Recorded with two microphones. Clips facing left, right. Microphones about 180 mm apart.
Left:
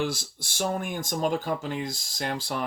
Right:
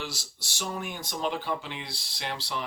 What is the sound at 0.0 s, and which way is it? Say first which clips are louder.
Speech: left 9 dB; 50° left (ahead or behind).